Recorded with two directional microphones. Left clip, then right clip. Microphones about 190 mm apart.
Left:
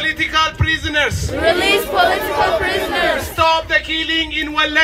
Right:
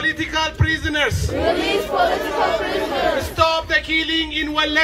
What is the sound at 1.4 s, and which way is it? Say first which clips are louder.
A man's voice: left 5 dB; 40° left (ahead or behind).